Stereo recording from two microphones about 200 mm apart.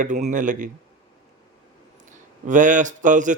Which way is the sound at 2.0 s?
40° right (ahead or behind).